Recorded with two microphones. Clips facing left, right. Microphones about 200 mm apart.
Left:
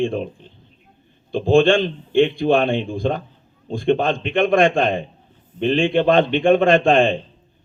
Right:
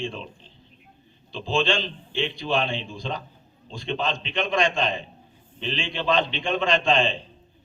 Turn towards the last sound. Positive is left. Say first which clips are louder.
# left 8 dB
turn(degrees=55)  # may be behind; listen again after turning